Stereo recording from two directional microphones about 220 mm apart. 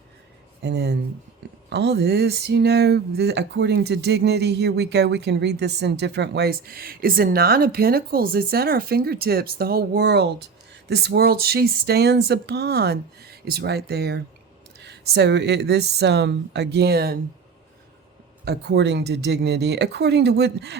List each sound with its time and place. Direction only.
0.6 s speech: 50° right (ahead or behind)
18.4 s speech: 50° right (ahead or behind)